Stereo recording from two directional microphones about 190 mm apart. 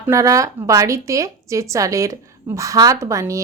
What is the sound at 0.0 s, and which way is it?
A woman's voice, 15° right (ahead or behind).